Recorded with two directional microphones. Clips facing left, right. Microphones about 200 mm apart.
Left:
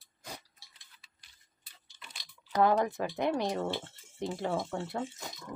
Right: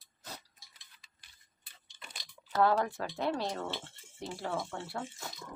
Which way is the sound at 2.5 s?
15° left (ahead or behind).